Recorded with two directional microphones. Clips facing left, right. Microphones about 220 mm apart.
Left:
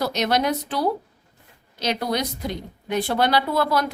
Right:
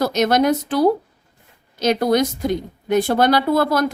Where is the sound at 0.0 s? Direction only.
50° right (ahead or behind).